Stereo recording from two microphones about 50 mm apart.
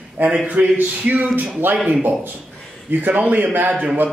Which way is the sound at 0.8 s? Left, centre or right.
Right.